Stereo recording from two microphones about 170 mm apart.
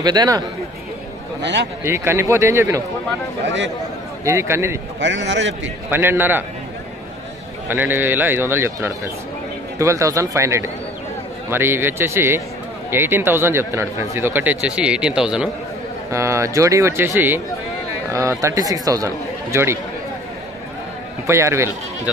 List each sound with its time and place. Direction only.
0.0 s speech: 25° right (ahead or behind)
1.9 s speech: 15° right (ahead or behind)
4.2 s speech: 15° right (ahead or behind)
5.0 s a man's voice: 90° right
5.9 s speech: 10° right (ahead or behind)
7.6 s speech: 10° right (ahead or behind)
16.1 s speech: 15° right (ahead or behind)
21.3 s speech: 15° right (ahead or behind)